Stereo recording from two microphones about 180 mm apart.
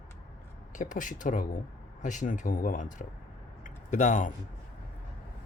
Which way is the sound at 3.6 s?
45° left (ahead or behind).